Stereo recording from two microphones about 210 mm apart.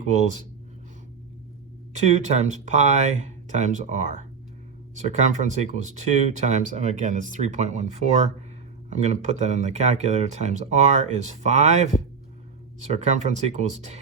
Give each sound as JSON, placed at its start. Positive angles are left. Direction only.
{"t": 0.0, "sound": "speech", "side_deg": -35}
{"t": 1.9, "sound": "speech", "side_deg": -35}